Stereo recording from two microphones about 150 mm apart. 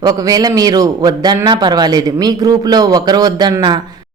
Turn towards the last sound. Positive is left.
turn(degrees=-30)  # may be behind; listen again after turning